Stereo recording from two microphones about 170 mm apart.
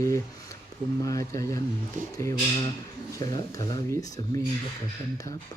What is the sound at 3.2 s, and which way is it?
Speech, 20° left (ahead or behind).